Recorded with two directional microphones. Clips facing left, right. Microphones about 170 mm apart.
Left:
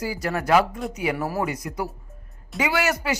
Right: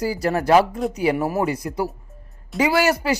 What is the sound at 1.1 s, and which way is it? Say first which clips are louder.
Speech: right 4 dB; 20° right (ahead or behind).